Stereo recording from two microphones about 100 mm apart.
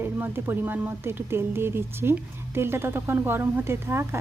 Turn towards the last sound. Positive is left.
turn(degrees=-25)  # may be behind; listen again after turning